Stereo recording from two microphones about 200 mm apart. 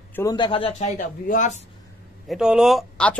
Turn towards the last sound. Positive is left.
turn(degrees=5)  # may be behind; listen again after turning